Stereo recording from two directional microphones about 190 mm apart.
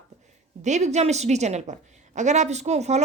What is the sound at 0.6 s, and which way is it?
A woman's voice, 40° right (ahead or behind).